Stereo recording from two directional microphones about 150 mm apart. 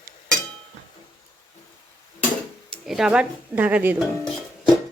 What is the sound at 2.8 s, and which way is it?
Speech, centre (ahead or behind).